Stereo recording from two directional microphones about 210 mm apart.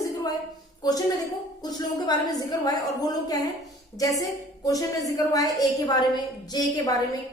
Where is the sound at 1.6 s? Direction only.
20° left (ahead or behind).